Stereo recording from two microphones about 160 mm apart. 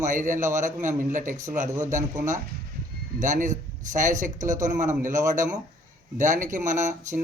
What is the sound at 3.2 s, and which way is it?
A man's voice, 50° right (ahead or behind).